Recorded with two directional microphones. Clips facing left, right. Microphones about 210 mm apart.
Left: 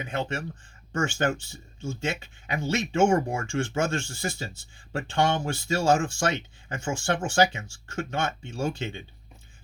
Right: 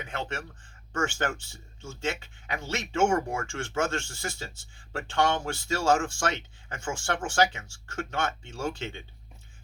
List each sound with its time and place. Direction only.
0.0 s speech: 15° left (ahead or behind)